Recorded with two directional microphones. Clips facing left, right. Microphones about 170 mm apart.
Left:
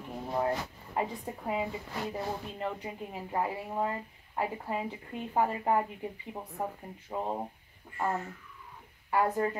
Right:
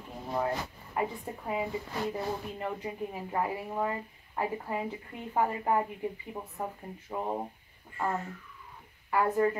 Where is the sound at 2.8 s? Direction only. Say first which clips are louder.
Right 3 dB; 20° left (ahead or behind).